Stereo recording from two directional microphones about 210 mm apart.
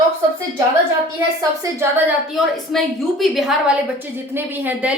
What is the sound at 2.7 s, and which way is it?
A woman's voice, centre (ahead or behind).